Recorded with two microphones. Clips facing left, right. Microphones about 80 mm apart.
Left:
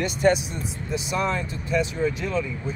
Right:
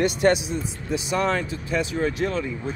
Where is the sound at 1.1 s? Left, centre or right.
Right.